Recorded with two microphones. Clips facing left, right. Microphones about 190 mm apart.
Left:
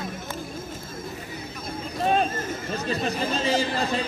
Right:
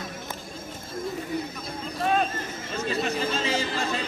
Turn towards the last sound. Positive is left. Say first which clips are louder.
# left 3 dB
turn(degrees=35)  # may be behind; listen again after turning